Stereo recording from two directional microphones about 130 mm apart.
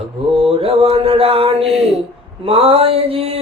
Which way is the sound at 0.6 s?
45° right (ahead or behind).